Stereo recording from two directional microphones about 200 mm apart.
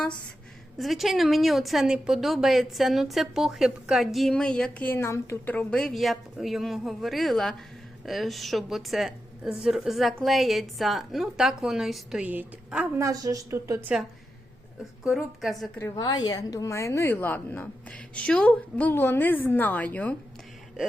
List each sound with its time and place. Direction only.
0.8 s a woman's voice: centre (ahead or behind)
15.0 s a woman's voice: centre (ahead or behind)
15.8 s a woman's voice: 20° left (ahead or behind)